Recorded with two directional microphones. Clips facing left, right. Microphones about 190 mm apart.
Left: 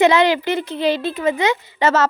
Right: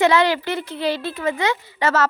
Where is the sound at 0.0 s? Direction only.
20° left (ahead or behind).